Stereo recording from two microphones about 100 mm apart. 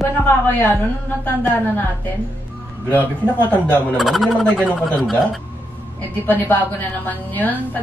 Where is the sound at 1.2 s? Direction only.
15° left (ahead or behind).